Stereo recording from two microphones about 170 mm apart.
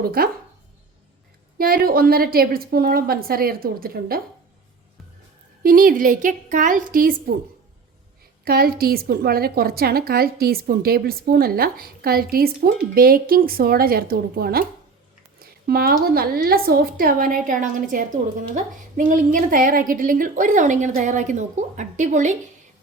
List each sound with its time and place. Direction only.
0.0 s a woman's voice: 60° right (ahead or behind)
1.5 s a woman's voice: 60° right (ahead or behind)
5.6 s a woman's voice: 55° right (ahead or behind)
8.4 s a woman's voice: 60° right (ahead or behind); by 22.4 s 45° right (ahead or behind)